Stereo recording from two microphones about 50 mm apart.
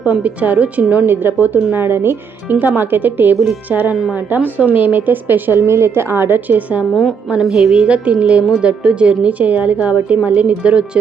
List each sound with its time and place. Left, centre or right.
0.1 s a woman's voice: right
1.0 s a woman's voice: right
2.5 s a woman's voice: right
7.3 s a woman's voice: centre
7.8 s a woman's voice: right